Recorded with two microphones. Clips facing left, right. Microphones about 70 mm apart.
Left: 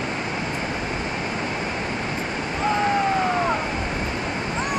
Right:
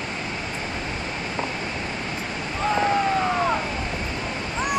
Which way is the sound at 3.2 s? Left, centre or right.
Centre.